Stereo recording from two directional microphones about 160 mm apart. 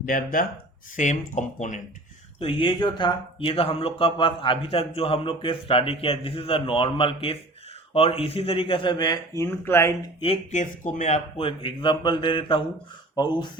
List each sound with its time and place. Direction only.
0.0 s speech: 60° left (ahead or behind)
2.4 s speech: 35° left (ahead or behind); by 9.9 s 15° left (ahead or behind)
10.5 s speech: 50° left (ahead or behind); by 13.5 s 30° left (ahead or behind)